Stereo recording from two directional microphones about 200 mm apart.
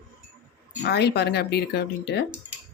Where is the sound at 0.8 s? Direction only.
55° left (ahead or behind).